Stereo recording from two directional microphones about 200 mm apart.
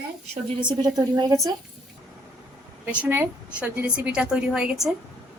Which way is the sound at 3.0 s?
10° right (ahead or behind).